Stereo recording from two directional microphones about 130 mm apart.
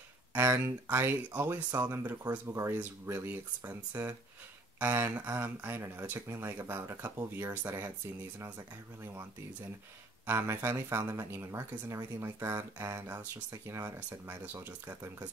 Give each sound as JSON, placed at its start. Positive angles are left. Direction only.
{"t": 0.3, "sound": "speech", "side_deg": -15}
{"t": 10.2, "sound": "speech", "side_deg": -20}